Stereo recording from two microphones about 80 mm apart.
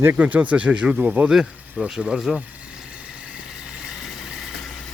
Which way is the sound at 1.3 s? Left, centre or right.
Centre.